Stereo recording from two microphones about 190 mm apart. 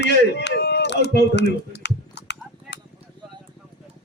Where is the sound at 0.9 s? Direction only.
65° left (ahead or behind).